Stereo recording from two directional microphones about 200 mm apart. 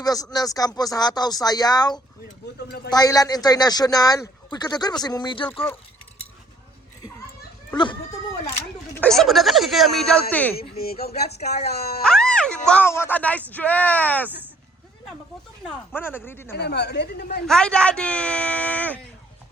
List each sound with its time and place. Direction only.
0.0 s speech: 20° left (ahead or behind)
9.0 s speech: centre (ahead or behind)
10.8 s speech: 50° left (ahead or behind)
12.0 s speech: 5° left (ahead or behind)
14.3 s speech: 10° right (ahead or behind)
15.9 s speech: 10° left (ahead or behind)
16.6 s speech: 55° left (ahead or behind)
17.4 s speech: 5° left (ahead or behind)